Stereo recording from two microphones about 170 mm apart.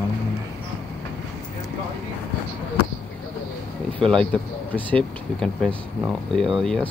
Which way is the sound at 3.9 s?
5° left (ahead or behind).